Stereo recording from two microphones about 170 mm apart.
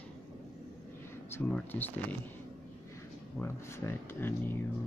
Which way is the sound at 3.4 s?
15° left (ahead or behind).